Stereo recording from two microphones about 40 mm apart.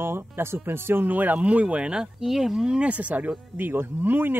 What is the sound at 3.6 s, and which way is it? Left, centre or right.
Speech, right.